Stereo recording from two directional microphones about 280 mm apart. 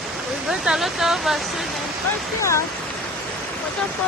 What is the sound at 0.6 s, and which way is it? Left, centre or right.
Speech, centre.